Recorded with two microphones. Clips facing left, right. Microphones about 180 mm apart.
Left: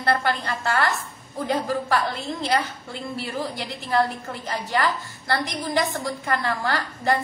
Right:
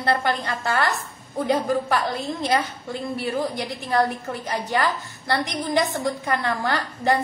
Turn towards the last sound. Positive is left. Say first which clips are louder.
# right 1 dB
turn(degrees=-20)  # may be behind; listen again after turning